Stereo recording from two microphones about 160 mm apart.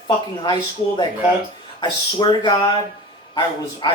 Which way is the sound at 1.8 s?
25° left (ahead or behind).